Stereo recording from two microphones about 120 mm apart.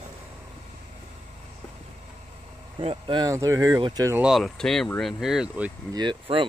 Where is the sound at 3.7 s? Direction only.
35° right (ahead or behind).